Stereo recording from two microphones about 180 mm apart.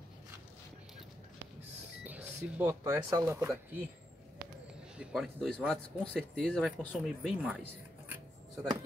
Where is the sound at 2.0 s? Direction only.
10° right (ahead or behind).